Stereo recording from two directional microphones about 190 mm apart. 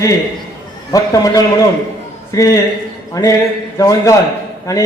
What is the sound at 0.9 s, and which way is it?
A man's voice, 20° left (ahead or behind).